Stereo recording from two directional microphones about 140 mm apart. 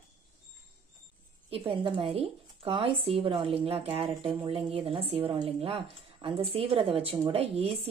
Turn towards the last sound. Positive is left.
turn(degrees=-45)  # may be behind; listen again after turning